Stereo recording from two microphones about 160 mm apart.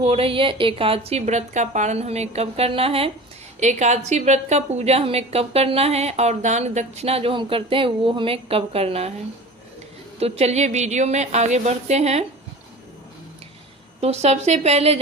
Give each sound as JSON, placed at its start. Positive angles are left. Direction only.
{"t": 0.0, "sound": "a woman's voice", "side_deg": -35}
{"t": 3.6, "sound": "a woman's voice", "side_deg": -45}
{"t": 10.2, "sound": "a woman's voice", "side_deg": -40}
{"t": 14.0, "sound": "a woman's voice", "side_deg": -40}